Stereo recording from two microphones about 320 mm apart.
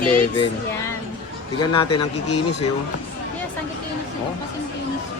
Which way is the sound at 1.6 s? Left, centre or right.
Centre.